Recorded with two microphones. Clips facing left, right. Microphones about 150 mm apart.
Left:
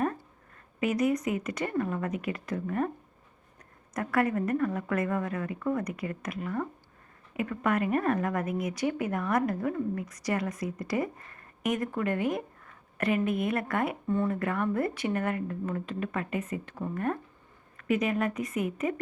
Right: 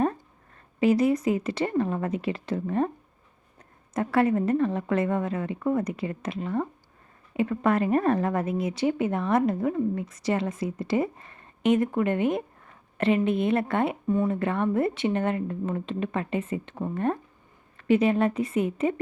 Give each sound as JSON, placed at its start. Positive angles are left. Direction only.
{"t": 0.8, "sound": "a woman's voice", "side_deg": -30}
{"t": 3.9, "sound": "a woman's voice", "side_deg": -25}
{"t": 14.1, "sound": "speech", "side_deg": -15}
{"t": 14.3, "sound": "a woman's voice", "side_deg": -25}